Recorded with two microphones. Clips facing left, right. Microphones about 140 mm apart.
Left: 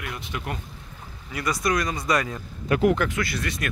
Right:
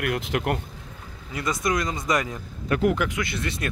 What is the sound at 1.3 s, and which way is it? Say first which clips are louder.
Speech: even; 20° right (ahead or behind).